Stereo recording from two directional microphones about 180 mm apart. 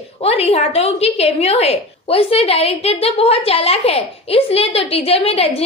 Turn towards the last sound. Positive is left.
turn(degrees=35)  # may be behind; listen again after turning